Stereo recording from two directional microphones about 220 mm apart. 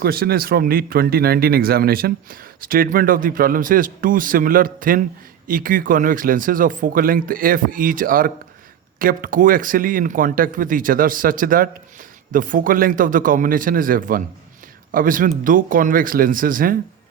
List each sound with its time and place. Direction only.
0.0 s speech: 45° right (ahead or behind)